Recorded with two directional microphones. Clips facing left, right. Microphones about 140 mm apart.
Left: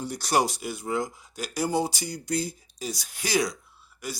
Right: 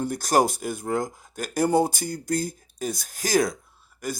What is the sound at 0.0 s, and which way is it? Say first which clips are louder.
Speech: right 4 dB; 50° right (ahead or behind).